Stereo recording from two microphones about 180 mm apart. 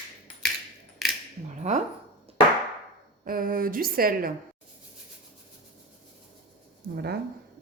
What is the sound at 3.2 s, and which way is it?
A woman's voice, 50° right (ahead or behind).